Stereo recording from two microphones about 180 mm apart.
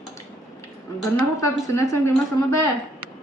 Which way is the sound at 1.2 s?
15° left (ahead or behind).